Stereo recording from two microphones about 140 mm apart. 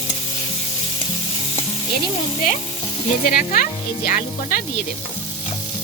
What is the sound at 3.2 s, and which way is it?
Speech, 60° left (ahead or behind).